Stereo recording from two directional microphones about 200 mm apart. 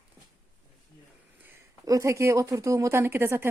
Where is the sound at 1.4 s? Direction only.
15° right (ahead or behind).